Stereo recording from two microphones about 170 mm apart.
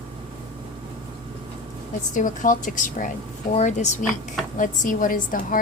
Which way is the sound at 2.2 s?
50° left (ahead or behind).